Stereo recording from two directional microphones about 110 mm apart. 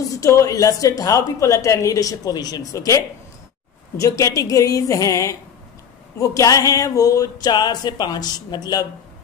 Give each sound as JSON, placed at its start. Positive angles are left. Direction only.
{"t": 0.1, "sound": "a woman's voice", "side_deg": 30}